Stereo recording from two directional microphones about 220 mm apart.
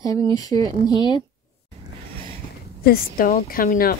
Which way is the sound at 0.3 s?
15° left (ahead or behind).